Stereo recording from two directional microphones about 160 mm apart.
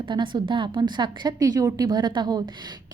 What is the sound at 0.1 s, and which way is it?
A woman's voice, 30° right (ahead or behind).